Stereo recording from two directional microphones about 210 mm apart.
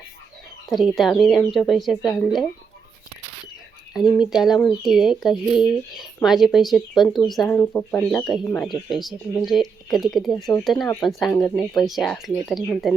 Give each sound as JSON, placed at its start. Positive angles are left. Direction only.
{"t": 0.7, "sound": "speech", "side_deg": 0}
{"t": 3.9, "sound": "speech", "side_deg": 0}